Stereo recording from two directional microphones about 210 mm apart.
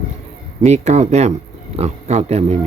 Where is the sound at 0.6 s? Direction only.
35° right (ahead or behind).